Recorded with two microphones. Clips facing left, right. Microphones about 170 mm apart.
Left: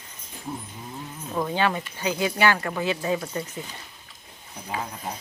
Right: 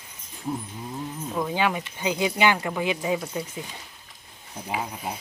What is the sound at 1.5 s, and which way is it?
Speech, 15° right (ahead or behind).